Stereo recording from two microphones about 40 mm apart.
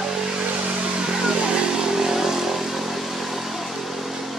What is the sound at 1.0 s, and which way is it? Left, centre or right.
Vehicle, centre.